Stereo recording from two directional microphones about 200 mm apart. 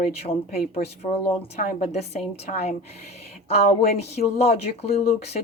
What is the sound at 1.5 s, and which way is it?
Speech, 35° left (ahead or behind).